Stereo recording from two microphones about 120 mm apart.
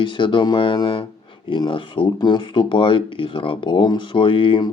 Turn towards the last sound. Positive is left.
turn(degrees=45)  # may be behind; listen again after turning